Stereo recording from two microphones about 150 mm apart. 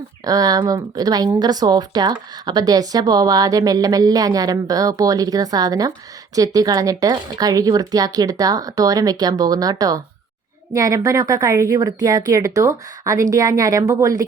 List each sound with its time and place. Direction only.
0.3 s a woman's voice: 25° right (ahead or behind)